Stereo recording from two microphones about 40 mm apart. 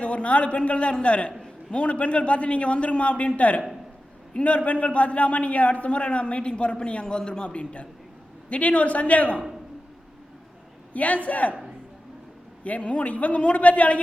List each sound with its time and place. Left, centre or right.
0.0 s a man's voice: left
10.9 s a man's voice: left
12.6 s a man's voice: left